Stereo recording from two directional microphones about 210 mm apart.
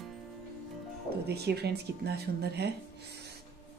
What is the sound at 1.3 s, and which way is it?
Speech, 50° right (ahead or behind).